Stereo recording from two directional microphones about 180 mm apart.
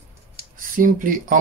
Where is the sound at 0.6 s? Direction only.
50° right (ahead or behind).